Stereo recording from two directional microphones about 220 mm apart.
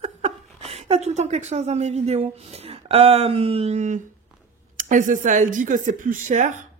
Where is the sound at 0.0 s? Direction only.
30° right (ahead or behind).